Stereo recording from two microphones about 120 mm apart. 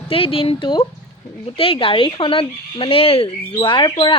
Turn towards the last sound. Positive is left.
turn(degrees=45)  # may be behind; listen again after turning